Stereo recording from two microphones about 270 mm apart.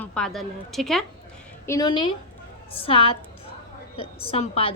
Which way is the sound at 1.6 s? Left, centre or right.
Centre.